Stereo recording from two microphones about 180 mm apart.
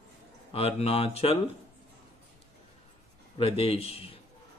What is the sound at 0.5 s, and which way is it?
Speech, 35° left (ahead or behind).